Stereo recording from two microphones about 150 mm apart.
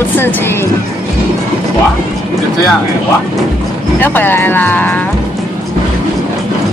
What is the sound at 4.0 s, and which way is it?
A woman's voice, 15° left (ahead or behind).